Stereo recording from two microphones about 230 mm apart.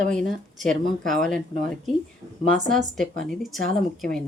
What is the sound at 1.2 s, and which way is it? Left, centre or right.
Speech, centre.